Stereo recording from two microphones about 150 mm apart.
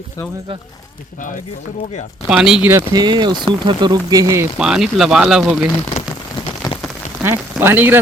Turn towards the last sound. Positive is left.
turn(degrees=-15)  # may be behind; listen again after turning